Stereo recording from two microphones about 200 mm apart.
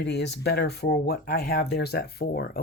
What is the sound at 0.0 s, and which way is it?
Speech, 60° left (ahead or behind).